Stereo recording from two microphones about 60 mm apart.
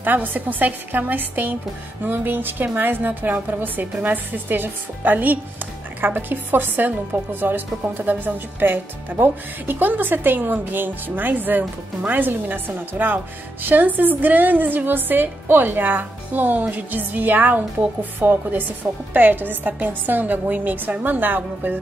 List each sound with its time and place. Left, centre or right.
0.0 s speech: right